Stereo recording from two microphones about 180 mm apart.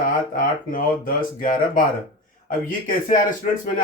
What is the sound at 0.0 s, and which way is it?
Speech, 50° left (ahead or behind).